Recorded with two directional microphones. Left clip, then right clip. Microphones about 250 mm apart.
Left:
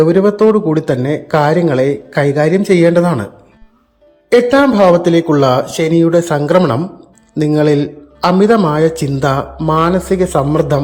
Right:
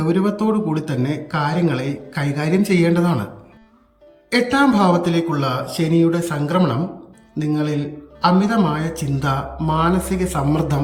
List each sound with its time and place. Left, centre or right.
0.0 s a man's voice: centre
4.3 s a man's voice: centre